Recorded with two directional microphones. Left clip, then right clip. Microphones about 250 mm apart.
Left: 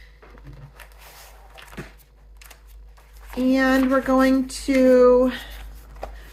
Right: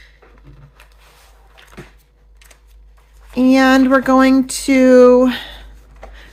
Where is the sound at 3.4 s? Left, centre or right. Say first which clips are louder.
Right 8 dB; right.